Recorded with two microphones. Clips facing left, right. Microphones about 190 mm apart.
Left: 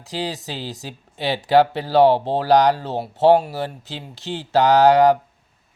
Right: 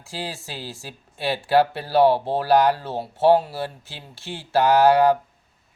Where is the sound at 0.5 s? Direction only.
20° left (ahead or behind).